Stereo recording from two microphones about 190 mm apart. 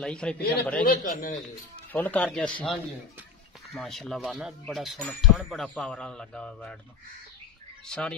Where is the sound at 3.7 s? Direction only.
Centre (ahead or behind).